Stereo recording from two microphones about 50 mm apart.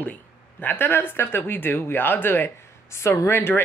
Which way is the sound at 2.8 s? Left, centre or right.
Left.